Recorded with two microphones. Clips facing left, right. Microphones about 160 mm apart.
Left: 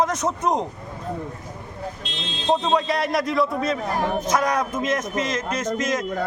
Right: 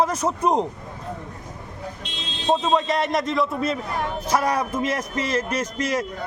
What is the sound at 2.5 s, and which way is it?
A man's voice, centre (ahead or behind).